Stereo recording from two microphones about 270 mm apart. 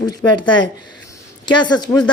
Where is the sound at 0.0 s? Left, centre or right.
Centre.